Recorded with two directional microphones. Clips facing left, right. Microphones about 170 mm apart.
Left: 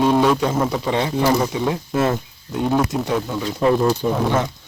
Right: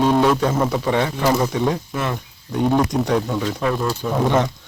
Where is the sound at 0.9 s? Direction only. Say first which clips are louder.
Left 3 dB; 15° left (ahead or behind).